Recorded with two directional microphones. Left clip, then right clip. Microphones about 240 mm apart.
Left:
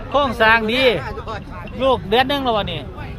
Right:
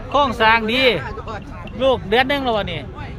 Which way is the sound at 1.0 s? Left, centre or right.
Left.